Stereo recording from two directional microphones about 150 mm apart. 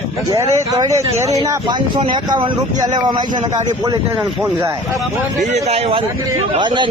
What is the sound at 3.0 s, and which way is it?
Speech, 30° right (ahead or behind).